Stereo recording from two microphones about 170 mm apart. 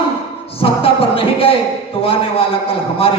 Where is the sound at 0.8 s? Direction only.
35° left (ahead or behind).